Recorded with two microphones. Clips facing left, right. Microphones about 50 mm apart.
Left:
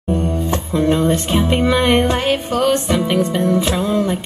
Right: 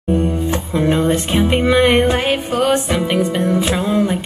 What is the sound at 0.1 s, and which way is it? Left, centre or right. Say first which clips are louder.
Music: right 2 dB; centre.